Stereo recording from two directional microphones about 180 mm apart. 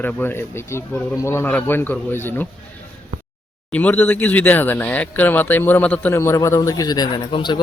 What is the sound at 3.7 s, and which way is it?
Speech, 10° left (ahead or behind).